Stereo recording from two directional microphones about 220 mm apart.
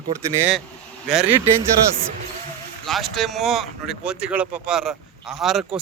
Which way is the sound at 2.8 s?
Centre (ahead or behind).